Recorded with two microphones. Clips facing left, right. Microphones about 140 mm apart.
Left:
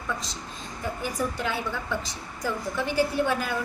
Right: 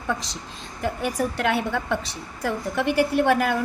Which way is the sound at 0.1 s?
80° right.